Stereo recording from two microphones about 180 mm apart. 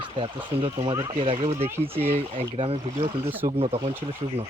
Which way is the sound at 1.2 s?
30° right (ahead or behind).